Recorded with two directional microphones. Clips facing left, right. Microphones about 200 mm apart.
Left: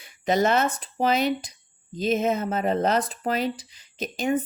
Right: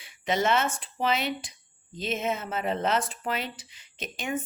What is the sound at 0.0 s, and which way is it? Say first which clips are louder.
Speech: left 5 dB; 40° left (ahead or behind).